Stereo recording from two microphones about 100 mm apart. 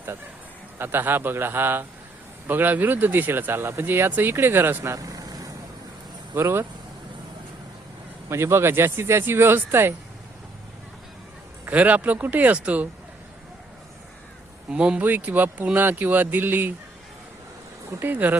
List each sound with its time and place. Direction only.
0.8 s speech: 20° right (ahead or behind); by 5.5 s 40° right (ahead or behind)
6.3 s speech: 25° right (ahead or behind)
8.3 s speech: 25° right (ahead or behind)
11.6 s speech: 15° right (ahead or behind)
14.7 s speech: 10° right (ahead or behind)
18.0 s speech: 15° right (ahead or behind)